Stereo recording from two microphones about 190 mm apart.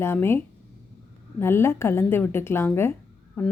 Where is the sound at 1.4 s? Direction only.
15° left (ahead or behind).